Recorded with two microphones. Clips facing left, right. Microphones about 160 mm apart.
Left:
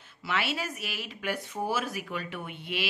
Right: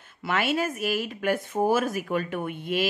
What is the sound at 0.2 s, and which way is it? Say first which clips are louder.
A woman's voice: right 6 dB; 50° right (ahead or behind).